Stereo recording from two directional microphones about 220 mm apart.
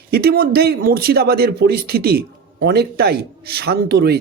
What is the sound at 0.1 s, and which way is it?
A man's voice, 45° right (ahead or behind).